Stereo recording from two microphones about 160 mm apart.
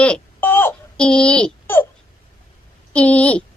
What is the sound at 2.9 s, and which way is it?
Speech, 5° left (ahead or behind).